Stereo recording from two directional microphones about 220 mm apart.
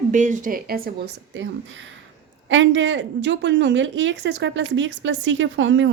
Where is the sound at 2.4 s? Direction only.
60° right (ahead or behind).